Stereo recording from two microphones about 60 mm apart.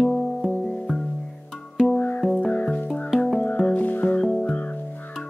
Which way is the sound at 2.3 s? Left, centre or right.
Left.